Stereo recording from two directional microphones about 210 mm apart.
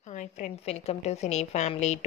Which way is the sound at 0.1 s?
35° left (ahead or behind).